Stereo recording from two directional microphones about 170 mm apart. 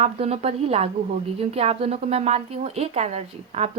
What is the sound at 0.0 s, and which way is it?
Speech, 35° right (ahead or behind).